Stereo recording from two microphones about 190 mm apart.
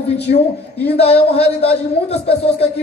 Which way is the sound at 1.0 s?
30° left (ahead or behind).